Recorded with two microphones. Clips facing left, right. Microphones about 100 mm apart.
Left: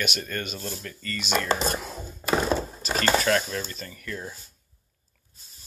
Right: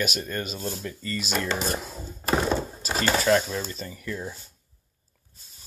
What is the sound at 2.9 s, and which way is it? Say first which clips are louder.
Speech: right 1 dB; 15° right (ahead or behind).